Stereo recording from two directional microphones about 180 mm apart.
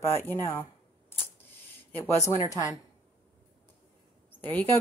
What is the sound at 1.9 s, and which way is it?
Speech, 15° left (ahead or behind).